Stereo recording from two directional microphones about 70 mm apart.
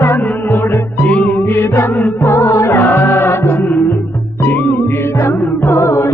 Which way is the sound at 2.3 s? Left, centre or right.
Left.